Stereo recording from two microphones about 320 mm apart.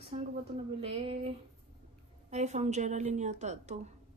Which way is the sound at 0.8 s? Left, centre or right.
Centre.